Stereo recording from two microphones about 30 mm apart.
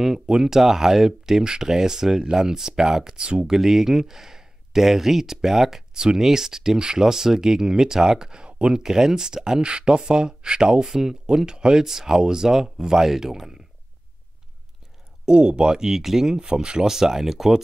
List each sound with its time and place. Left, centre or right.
0.4 s speech: centre
5.9 s speech: right
8.5 s a sound: right
8.7 s speech: centre
10.9 s speech: centre
11.3 s speech: right
11.8 s speech: centre
15.2 s speech: right
16.0 s speech: centre
16.3 s speech: right